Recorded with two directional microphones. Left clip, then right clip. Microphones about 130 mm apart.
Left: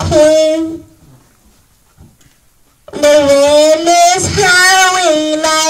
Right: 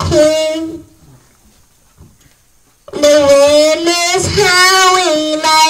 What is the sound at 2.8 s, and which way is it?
Music, 45° right (ahead or behind).